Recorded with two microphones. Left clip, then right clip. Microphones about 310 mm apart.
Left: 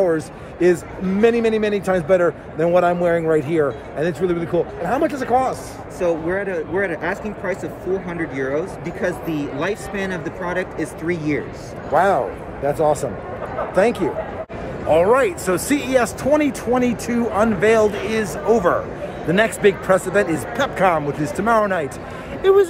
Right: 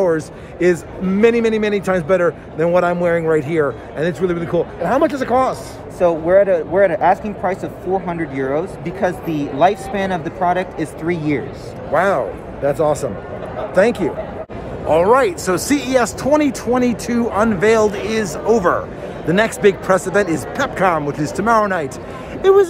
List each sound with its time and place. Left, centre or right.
0.0 s a man's voice: centre
5.9 s speech: right
11.9 s a man's voice: centre